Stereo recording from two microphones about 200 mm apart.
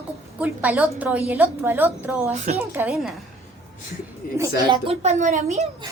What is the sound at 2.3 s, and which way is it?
Speech, 35° right (ahead or behind).